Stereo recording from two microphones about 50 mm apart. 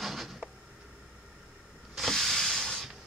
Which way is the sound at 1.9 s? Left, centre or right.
Centre.